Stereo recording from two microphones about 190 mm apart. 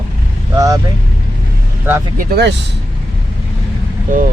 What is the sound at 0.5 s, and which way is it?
Speech, 20° right (ahead or behind).